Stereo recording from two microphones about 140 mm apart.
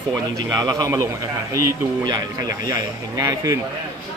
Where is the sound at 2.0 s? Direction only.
25° right (ahead or behind).